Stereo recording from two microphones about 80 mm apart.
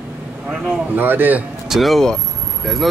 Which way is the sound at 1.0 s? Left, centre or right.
Right.